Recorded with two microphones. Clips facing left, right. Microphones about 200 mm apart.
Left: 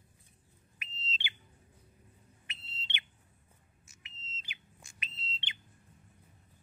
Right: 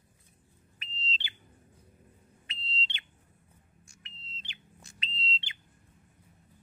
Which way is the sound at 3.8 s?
5° left (ahead or behind).